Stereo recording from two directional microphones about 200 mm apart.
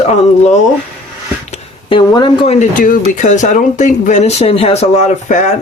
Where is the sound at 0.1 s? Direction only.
35° left (ahead or behind).